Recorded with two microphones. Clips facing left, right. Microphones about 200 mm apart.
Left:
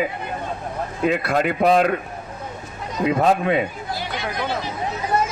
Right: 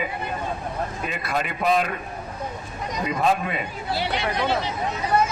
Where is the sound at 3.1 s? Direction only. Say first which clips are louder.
Left 5 dB; 55° left (ahead or behind).